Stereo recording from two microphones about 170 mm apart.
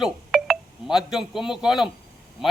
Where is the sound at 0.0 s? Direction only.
5° right (ahead or behind).